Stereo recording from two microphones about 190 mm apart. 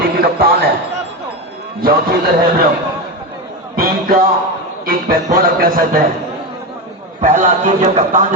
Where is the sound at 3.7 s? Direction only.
50° right (ahead or behind).